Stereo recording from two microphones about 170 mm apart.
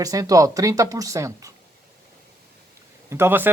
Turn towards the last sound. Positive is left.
turn(degrees=-10)  # may be behind; listen again after turning